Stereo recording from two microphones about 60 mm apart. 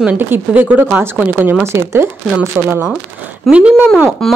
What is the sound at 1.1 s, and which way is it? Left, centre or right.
Speech, right.